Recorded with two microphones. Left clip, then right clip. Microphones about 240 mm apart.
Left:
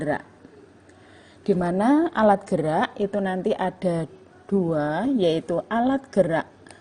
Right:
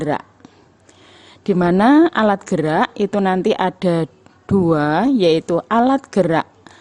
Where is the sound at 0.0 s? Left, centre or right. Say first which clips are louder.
Right 5 dB; right.